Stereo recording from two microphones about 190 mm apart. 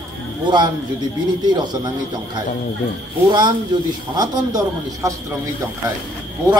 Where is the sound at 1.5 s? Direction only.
25° right (ahead or behind).